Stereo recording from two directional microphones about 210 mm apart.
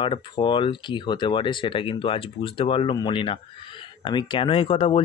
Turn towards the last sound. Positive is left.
turn(degrees=25)  # may be behind; listen again after turning